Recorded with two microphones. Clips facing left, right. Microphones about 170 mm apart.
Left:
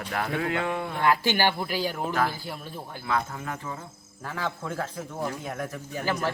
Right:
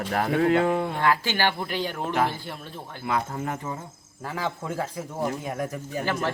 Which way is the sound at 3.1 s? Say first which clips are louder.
Right 2 dB; 30° right (ahead or behind).